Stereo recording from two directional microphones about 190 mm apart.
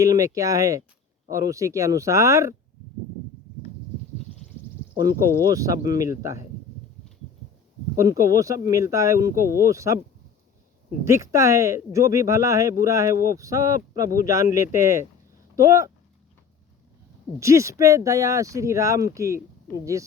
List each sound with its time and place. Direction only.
0.0 s speech: 15° right (ahead or behind)
5.5 s speech: 20° right (ahead or behind)
7.9 s speech: 15° right (ahead or behind)
11.0 s speech: 15° right (ahead or behind)
17.4 s speech: 15° right (ahead or behind)